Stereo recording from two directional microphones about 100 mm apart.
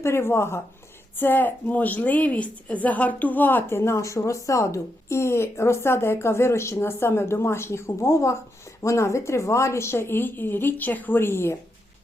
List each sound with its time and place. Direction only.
0.0 s a woman's voice: 25° left (ahead or behind)